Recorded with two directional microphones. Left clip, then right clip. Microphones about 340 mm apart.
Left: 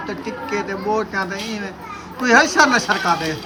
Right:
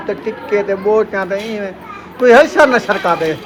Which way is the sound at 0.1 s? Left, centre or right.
Centre.